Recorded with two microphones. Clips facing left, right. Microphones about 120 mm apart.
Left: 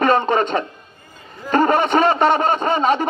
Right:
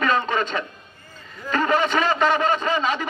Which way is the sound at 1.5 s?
45° left (ahead or behind).